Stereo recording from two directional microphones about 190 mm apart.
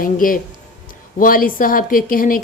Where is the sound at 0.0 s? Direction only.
45° left (ahead or behind).